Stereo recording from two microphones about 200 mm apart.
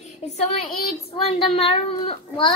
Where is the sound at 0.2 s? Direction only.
30° left (ahead or behind).